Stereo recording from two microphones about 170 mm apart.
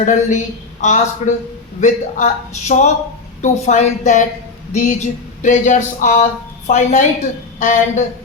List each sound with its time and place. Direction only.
0.0 s speech: 45° left (ahead or behind)